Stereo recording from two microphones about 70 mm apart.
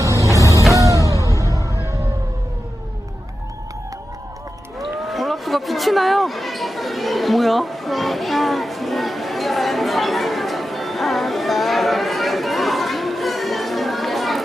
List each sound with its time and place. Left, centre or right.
0.0 s music: right
1.1 s music: left
4.8 s a sound: centre